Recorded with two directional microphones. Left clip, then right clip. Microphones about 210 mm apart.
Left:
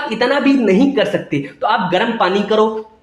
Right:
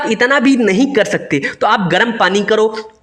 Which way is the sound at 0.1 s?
45° right (ahead or behind).